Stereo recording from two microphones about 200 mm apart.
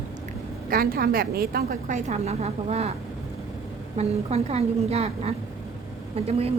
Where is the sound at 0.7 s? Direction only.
45° right (ahead or behind).